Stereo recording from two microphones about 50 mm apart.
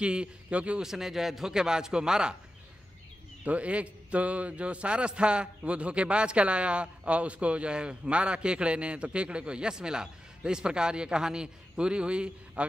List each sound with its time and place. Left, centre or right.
0.0 s a man's voice: right
0.8 s a man's voice: centre
3.4 s a man's voice: right